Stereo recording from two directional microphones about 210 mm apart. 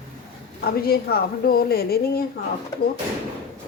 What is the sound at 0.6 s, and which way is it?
Speech, 45° left (ahead or behind).